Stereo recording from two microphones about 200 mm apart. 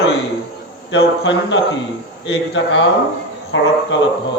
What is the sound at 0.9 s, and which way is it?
A man's voice, 65° left (ahead or behind).